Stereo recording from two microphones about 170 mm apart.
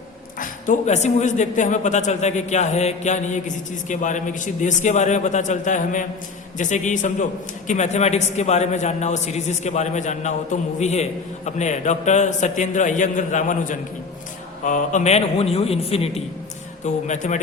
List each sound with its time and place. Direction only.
0.3 s a man's voice: 50° left (ahead or behind)